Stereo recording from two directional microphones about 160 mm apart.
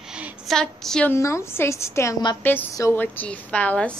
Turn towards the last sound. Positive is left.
turn(degrees=10)  # may be behind; listen again after turning